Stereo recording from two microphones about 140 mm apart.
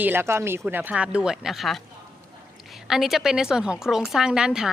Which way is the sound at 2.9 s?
Centre (ahead or behind).